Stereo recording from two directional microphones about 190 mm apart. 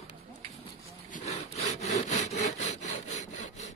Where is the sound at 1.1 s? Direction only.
35° left (ahead or behind).